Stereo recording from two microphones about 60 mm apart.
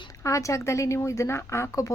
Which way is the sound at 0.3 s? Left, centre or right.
Left.